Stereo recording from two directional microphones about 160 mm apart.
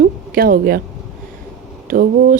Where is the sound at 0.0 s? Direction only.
60° right (ahead or behind).